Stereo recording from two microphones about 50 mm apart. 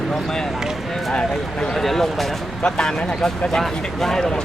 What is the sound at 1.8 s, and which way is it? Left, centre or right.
Speech, centre.